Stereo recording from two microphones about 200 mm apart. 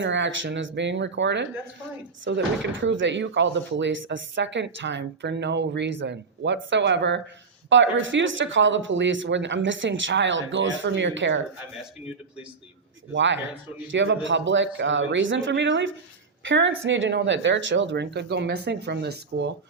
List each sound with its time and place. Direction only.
0.0 s speech: 65° right (ahead or behind)
13.1 s speech: 65° right (ahead or behind)